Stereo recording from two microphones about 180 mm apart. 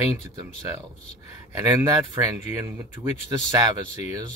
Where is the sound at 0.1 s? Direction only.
15° right (ahead or behind).